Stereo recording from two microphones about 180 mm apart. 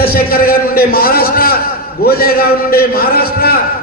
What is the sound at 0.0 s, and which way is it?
A man's voice, 55° left (ahead or behind).